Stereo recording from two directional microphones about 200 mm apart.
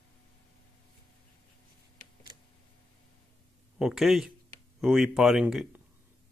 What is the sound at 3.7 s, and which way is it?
Speech, centre (ahead or behind).